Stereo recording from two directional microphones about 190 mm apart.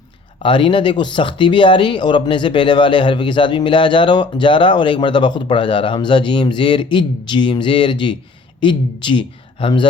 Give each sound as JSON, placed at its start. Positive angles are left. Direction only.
{"t": 0.3, "sound": "speech", "side_deg": 25}